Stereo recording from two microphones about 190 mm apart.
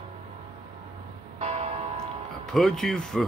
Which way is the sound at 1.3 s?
35° right (ahead or behind).